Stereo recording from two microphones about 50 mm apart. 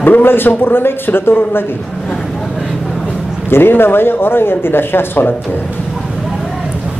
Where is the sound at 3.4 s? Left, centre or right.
Left.